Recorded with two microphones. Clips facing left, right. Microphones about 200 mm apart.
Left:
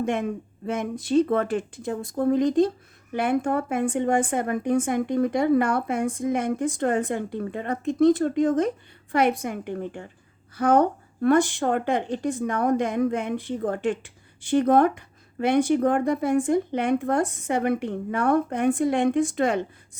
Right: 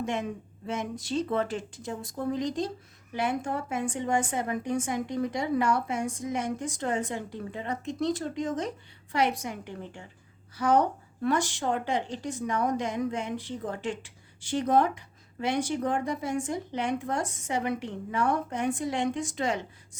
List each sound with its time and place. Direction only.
0.0 s speech: 55° left (ahead or behind)